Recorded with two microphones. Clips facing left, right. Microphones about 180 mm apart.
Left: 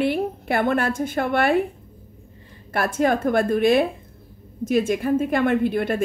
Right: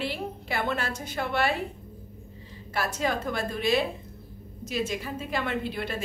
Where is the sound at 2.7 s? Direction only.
55° left (ahead or behind).